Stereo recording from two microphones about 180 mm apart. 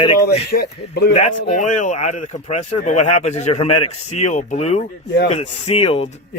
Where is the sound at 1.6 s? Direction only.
45° left (ahead or behind).